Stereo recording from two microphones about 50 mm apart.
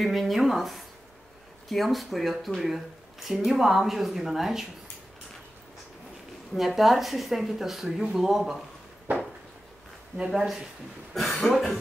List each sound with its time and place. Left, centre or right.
0.0 s speech: centre
6.5 s speech: centre
9.1 s a sound: right
10.3 s speech: centre